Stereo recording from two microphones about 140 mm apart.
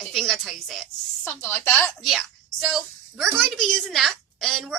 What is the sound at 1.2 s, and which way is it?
Speech, 10° left (ahead or behind).